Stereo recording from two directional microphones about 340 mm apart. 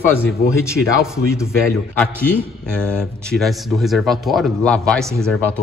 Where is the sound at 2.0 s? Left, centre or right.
Centre.